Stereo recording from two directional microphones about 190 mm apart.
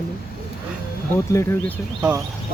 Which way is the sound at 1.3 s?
15° left (ahead or behind).